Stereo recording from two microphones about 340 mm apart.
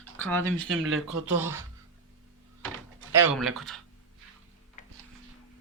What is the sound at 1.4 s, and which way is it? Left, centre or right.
Speech, centre.